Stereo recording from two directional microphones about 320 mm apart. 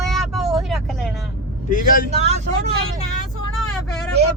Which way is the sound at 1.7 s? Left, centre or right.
Left.